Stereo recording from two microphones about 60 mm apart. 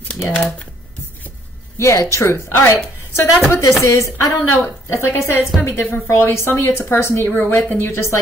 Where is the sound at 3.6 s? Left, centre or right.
Left.